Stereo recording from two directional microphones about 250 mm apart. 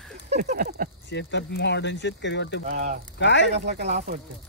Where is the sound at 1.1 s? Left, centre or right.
Left.